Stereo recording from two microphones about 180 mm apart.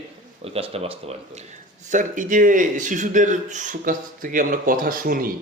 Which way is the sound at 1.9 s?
45° right (ahead or behind).